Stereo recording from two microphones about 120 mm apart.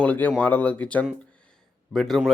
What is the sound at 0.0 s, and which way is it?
Speech, 10° left (ahead or behind).